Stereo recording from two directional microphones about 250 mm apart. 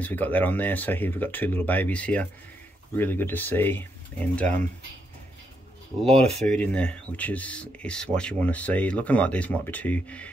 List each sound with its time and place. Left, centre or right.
0.0 s speech: centre
6.0 s speech: right
6.4 s speech: centre